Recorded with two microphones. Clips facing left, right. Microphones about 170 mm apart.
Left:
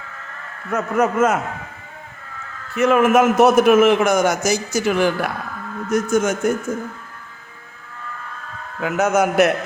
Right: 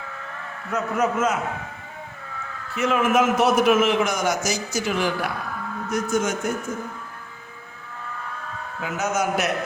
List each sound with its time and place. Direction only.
0.7 s a man's voice: 55° left (ahead or behind)
2.7 s a man's voice: 55° left (ahead or behind)
8.8 s a man's voice: 60° left (ahead or behind)